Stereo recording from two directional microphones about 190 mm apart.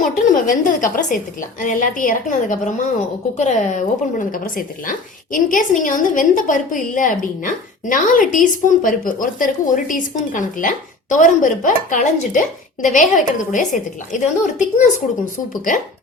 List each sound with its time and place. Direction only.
0.0 s a woman's voice: 45° left (ahead or behind)